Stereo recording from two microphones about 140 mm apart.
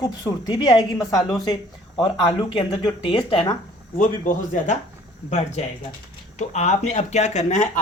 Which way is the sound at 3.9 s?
65° left (ahead or behind).